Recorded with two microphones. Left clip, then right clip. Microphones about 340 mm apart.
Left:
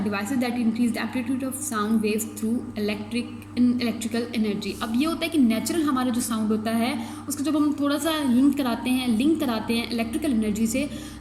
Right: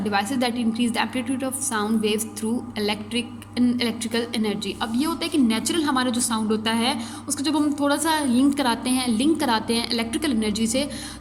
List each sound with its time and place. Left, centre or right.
0.1 s a woman's voice: right